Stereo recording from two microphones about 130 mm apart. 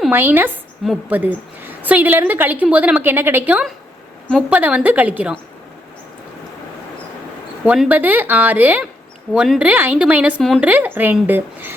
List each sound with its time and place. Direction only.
0.1 s a woman's voice: 15° right (ahead or behind)
7.6 s a woman's voice: 10° right (ahead or behind)